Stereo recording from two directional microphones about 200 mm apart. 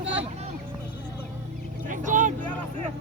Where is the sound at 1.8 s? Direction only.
40° right (ahead or behind).